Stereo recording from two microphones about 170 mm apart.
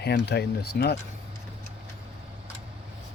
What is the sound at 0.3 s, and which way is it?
Speech, 75° left (ahead or behind).